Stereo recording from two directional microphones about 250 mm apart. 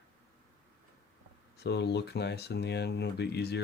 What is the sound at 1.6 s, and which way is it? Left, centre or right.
Speech, left.